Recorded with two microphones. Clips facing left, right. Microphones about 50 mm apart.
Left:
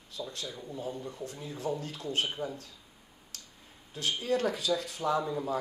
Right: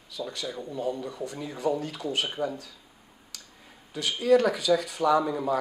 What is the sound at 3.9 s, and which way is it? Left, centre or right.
Speech, right.